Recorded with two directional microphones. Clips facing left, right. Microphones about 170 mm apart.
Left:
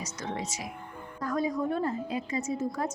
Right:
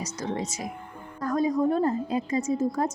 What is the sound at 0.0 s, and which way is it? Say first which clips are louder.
Speech: right 4 dB; 40° right (ahead or behind).